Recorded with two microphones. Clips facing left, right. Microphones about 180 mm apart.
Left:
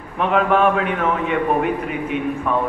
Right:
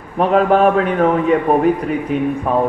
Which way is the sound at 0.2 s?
35° right (ahead or behind).